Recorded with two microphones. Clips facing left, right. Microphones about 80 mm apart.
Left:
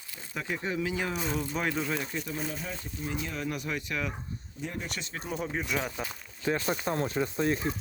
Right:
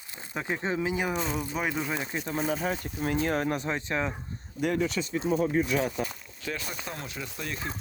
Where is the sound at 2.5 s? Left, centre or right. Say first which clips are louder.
Right 8 dB; right.